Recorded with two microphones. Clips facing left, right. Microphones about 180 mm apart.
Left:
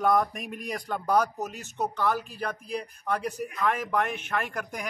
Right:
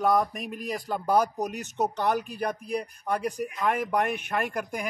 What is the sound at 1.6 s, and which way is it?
A man's voice, 20° right (ahead or behind).